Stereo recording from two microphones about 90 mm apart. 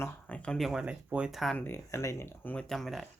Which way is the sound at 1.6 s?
25° left (ahead or behind).